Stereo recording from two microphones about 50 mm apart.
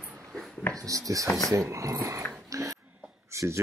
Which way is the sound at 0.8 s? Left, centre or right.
Right.